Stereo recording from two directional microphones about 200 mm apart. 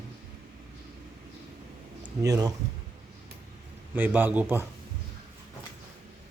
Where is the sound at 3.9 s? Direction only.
10° right (ahead or behind).